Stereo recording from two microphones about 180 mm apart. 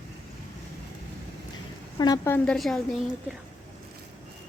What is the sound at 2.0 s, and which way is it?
Speech, 20° left (ahead or behind).